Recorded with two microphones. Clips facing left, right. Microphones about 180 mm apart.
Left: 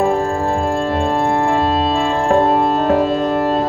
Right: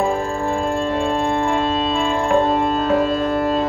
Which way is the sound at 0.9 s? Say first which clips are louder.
Left 3 dB; 45° left (ahead or behind).